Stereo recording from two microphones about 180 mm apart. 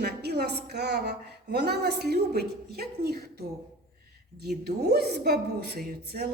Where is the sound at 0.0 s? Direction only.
65° right (ahead or behind).